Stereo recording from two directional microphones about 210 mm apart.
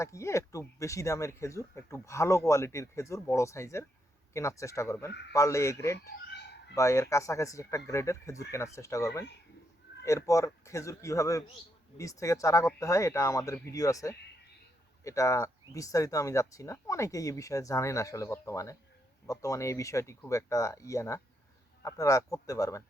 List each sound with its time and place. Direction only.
0.0 s speech: 15° left (ahead or behind)
6.2 s a sound: 55° left (ahead or behind)
6.7 s speech: 15° left (ahead or behind)